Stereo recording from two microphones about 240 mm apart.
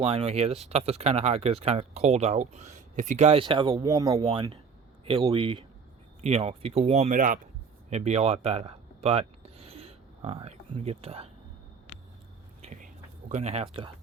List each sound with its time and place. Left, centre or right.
0.0 s speech: right
7.9 s a sound: right
12.6 s whispering: right